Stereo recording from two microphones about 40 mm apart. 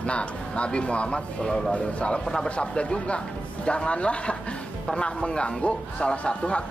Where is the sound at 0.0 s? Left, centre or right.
Left.